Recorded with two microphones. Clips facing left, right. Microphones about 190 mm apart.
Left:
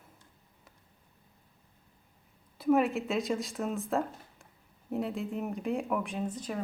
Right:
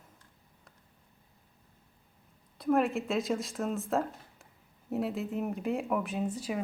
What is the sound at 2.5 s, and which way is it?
Speech, 5° left (ahead or behind).